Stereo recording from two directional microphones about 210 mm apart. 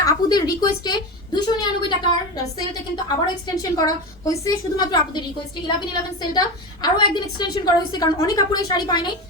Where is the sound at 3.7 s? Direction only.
15° left (ahead or behind).